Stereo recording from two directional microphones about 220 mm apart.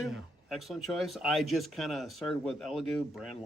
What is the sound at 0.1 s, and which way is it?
Speech, centre (ahead or behind).